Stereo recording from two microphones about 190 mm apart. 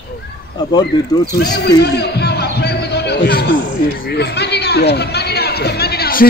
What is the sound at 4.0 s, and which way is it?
Speech, 60° left (ahead or behind).